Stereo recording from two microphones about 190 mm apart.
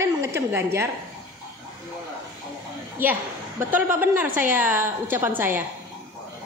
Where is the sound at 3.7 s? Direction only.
10° right (ahead or behind).